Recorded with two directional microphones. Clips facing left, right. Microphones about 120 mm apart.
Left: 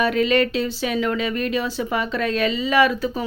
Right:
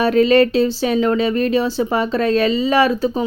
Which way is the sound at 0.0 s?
35° right (ahead or behind).